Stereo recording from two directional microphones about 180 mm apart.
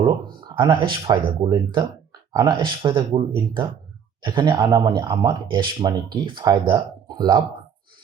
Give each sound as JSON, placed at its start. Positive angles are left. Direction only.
{"t": 0.0, "sound": "speech", "side_deg": -25}